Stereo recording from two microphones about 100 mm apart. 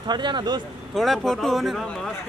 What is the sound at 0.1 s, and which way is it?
Speech, 50° right (ahead or behind).